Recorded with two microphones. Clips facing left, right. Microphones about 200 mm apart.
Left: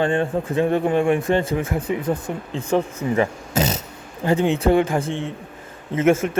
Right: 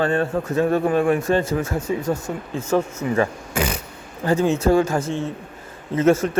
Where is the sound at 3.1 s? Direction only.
20° left (ahead or behind).